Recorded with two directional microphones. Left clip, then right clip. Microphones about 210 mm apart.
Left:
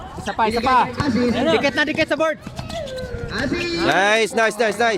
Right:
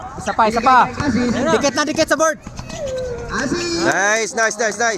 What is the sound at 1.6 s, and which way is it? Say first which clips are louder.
Speech: right 2 dB; 45° right (ahead or behind).